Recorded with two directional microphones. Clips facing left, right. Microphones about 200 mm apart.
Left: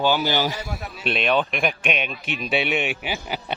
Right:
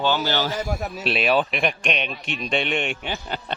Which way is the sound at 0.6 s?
40° right (ahead or behind).